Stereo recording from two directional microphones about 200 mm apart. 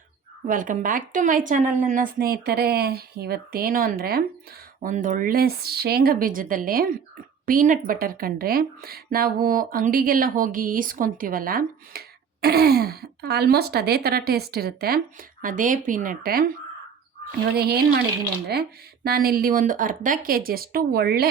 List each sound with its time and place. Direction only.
0.4 s speech: 40° right (ahead or behind)
17.6 s speech: 50° right (ahead or behind)
19.0 s speech: 50° right (ahead or behind)